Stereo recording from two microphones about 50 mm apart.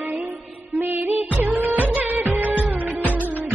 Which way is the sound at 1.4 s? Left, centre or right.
Right.